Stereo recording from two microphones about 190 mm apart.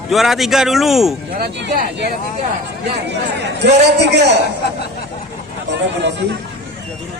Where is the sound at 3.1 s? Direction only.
65° right (ahead or behind).